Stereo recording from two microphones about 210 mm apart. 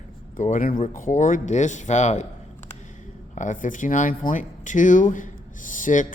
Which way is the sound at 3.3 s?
35° left (ahead or behind).